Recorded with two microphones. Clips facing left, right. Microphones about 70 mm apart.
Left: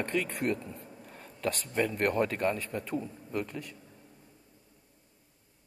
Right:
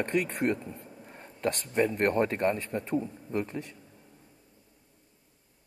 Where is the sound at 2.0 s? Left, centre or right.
Right.